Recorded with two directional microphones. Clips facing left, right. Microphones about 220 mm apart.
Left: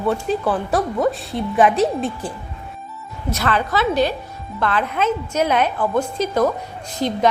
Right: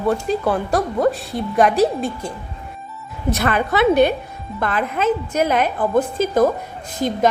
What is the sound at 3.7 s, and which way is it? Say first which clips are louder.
Speech: right 6 dB; 60° right (ahead or behind).